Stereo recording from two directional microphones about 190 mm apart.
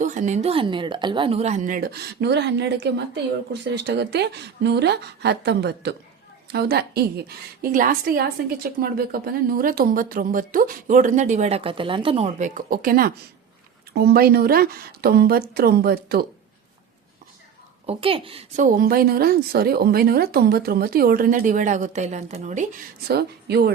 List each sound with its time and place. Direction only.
0.0 s a woman's voice: 40° right (ahead or behind)
17.8 s a woman's voice: 30° right (ahead or behind)
18.6 s a woman's voice: 50° right (ahead or behind)